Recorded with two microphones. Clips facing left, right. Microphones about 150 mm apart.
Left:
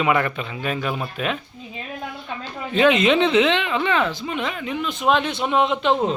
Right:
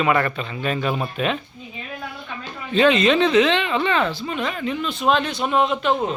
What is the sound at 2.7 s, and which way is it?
Speech, 15° left (ahead or behind).